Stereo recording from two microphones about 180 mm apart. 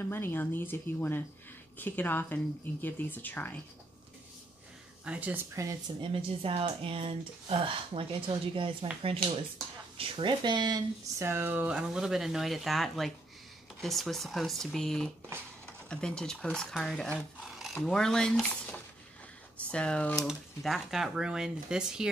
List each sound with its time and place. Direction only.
0.0 s speech: 10° left (ahead or behind)
5.0 s speech: 5° right (ahead or behind)
6.4 s speech: 30° right (ahead or behind); by 22.1 s 5° right (ahead or behind)